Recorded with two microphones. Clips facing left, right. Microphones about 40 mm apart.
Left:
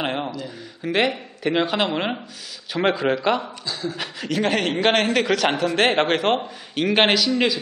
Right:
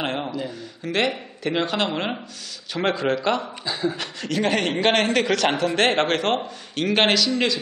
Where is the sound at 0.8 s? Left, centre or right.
Centre.